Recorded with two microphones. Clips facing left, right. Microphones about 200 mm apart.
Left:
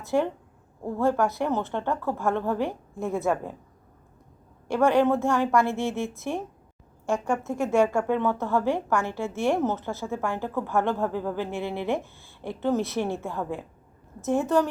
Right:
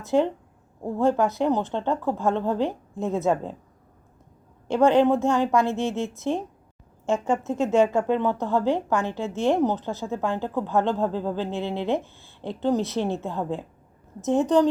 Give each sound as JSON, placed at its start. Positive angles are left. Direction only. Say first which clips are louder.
{"t": 0.0, "sound": "speech", "louder": "right 3 dB", "side_deg": -20}
{"t": 4.7, "sound": "speech", "louder": "right 3 dB", "side_deg": -20}